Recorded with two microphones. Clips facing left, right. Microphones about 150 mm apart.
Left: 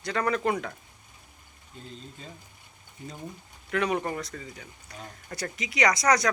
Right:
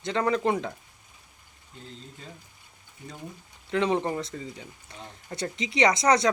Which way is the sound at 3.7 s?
25° right (ahead or behind).